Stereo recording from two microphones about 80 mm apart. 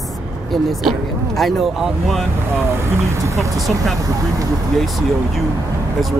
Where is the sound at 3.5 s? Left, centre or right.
Centre.